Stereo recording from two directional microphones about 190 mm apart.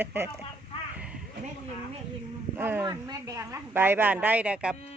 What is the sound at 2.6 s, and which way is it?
A woman's voice, 10° right (ahead or behind).